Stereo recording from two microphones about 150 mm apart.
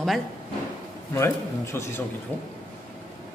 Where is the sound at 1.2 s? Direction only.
15° left (ahead or behind).